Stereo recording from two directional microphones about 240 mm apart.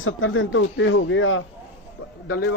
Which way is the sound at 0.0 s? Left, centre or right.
Left.